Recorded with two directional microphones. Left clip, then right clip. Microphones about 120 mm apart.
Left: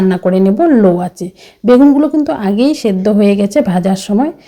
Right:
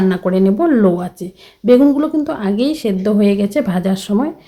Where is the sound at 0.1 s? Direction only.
35° left (ahead or behind).